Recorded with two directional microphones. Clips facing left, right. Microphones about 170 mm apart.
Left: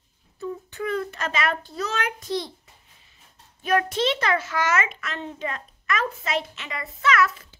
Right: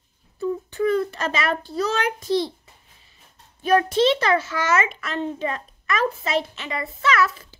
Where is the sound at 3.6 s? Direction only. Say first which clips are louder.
Right 5 dB; 30° right (ahead or behind).